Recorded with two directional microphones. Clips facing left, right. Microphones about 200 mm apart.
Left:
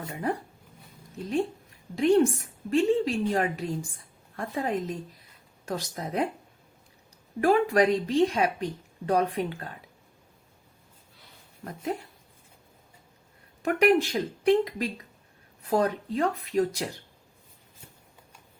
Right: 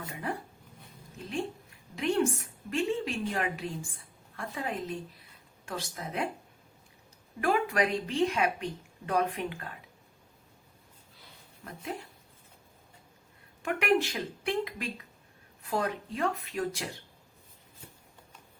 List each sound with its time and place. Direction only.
0.0 s a woman's voice: 40° left (ahead or behind)
2.0 s a woman's voice: 35° left (ahead or behind)
7.4 s a woman's voice: 35° left (ahead or behind)
13.6 s a woman's voice: 40° left (ahead or behind)